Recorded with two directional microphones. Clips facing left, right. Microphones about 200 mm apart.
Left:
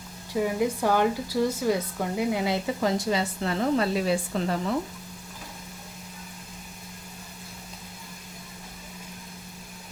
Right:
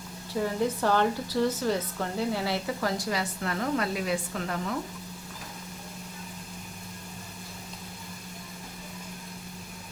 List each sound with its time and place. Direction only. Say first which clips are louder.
0.3 s speech: left 2 dB; 10° left (ahead or behind); by 4.5 s 30° left (ahead or behind)